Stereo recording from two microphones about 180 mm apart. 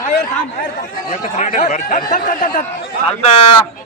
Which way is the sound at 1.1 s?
45° left (ahead or behind).